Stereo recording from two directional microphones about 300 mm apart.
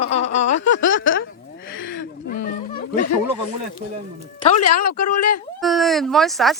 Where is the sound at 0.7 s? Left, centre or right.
Left.